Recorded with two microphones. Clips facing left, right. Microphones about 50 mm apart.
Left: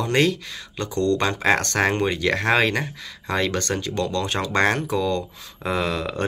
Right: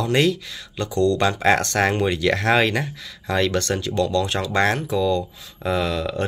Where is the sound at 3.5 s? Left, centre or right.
Left.